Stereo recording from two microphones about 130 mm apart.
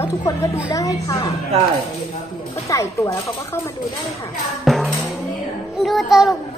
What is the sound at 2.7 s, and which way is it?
Speech, 25° left (ahead or behind).